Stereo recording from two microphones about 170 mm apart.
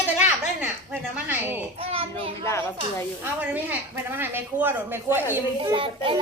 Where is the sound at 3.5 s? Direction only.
10° right (ahead or behind).